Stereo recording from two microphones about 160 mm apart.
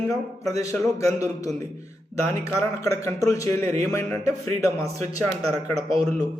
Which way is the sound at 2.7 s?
20° left (ahead or behind).